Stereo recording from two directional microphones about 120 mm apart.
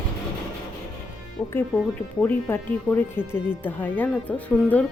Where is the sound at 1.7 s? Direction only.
15° left (ahead or behind).